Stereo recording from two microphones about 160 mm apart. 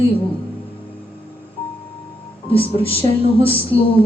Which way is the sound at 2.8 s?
35° left (ahead or behind).